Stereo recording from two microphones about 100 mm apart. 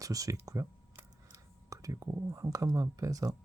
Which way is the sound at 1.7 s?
35° right (ahead or behind).